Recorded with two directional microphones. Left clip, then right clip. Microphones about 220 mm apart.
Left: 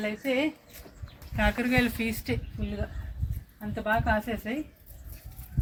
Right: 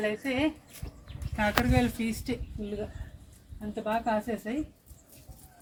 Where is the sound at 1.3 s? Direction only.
15° left (ahead or behind).